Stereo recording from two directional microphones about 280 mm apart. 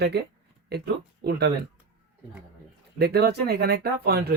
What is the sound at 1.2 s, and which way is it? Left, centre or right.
Speech, right.